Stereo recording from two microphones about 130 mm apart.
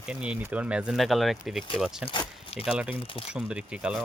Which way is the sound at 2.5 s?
10° right (ahead or behind).